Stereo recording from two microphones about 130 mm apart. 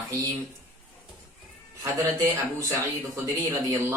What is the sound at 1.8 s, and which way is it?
A man's voice, 25° right (ahead or behind).